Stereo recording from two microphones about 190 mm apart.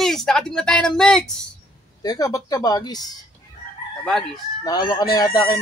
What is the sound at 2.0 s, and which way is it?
Chicken, 20° left (ahead or behind).